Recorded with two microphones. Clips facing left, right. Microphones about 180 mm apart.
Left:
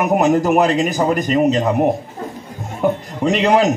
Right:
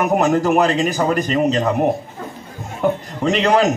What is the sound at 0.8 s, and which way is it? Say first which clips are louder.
Speech: left 1 dB; 15° left (ahead or behind).